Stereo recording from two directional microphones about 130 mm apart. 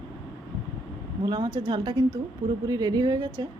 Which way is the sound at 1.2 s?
30° right (ahead or behind).